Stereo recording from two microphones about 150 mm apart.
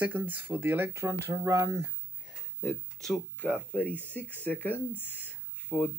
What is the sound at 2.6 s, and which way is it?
Speech, centre (ahead or behind).